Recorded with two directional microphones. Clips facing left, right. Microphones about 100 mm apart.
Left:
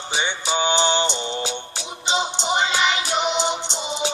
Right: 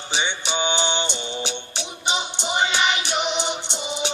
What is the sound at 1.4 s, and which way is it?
Music, 20° right (ahead or behind).